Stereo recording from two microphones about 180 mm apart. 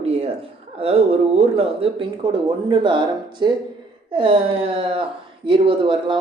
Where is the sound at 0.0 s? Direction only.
35° right (ahead or behind).